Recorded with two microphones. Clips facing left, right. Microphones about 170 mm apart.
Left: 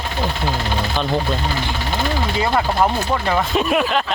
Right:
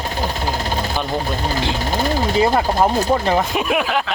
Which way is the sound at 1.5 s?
40° right (ahead or behind).